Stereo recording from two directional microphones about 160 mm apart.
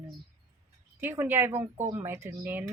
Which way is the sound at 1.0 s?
15° right (ahead or behind).